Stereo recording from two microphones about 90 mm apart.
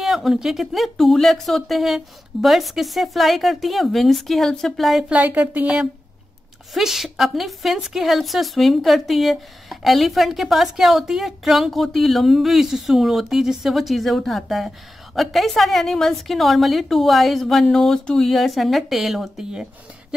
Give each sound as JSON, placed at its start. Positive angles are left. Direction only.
{"t": 0.0, "sound": "a woman's voice", "side_deg": 0}
{"t": 5.1, "sound": "speech", "side_deg": -15}
{"t": 6.7, "sound": "a woman's voice", "side_deg": 0}